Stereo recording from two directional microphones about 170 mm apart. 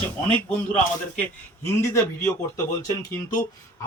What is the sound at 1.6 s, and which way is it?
A man's voice, 15° left (ahead or behind).